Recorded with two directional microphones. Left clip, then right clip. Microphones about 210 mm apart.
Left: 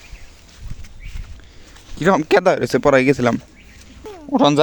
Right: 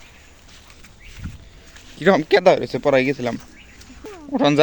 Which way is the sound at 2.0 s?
30° left (ahead or behind).